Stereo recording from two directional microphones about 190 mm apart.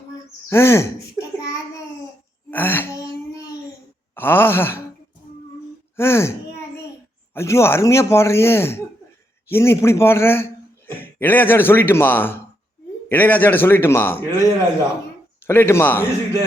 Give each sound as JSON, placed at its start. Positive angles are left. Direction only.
{"t": 0.5, "sound": "babbling", "side_deg": 15}
{"t": 2.5, "sound": "a sound", "side_deg": 10}
{"t": 4.1, "sound": "groan", "side_deg": 10}
{"t": 6.0, "sound": "gasp", "side_deg": 15}
{"t": 7.3, "sound": "a man's voice", "side_deg": 15}
{"t": 15.4, "sound": "speech", "side_deg": 15}